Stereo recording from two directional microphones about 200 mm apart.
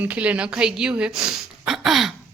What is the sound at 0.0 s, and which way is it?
A woman's voice, 5° right (ahead or behind).